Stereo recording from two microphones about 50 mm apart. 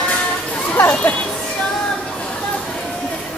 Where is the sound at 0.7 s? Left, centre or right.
Left.